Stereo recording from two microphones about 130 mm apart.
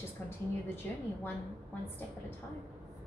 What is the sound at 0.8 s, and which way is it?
Speech, 15° left (ahead or behind).